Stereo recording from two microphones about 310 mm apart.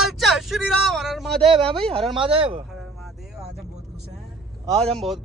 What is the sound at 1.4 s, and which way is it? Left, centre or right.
Speech, centre.